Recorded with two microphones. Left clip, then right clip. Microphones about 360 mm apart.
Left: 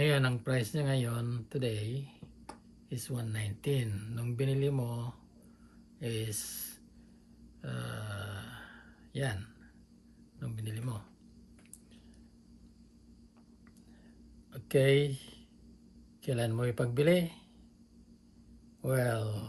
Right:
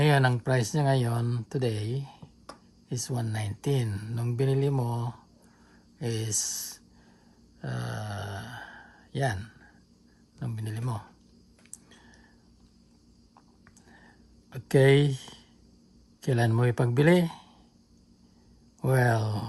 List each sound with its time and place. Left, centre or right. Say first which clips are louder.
0.0 s speech: right 6 dB; centre
14.5 s speech: right 5 dB; centre
18.8 s speech: right 6 dB; centre